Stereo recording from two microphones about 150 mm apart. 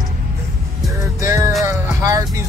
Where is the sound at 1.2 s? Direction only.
20° right (ahead or behind).